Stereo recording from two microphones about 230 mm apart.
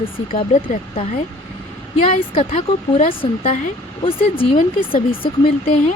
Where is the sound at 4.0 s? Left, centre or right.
Left.